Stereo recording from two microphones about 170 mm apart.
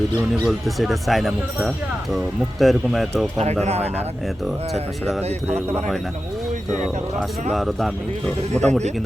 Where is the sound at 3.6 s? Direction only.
40° right (ahead or behind).